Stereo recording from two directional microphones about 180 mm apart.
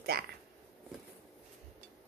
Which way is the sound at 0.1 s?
60° right (ahead or behind).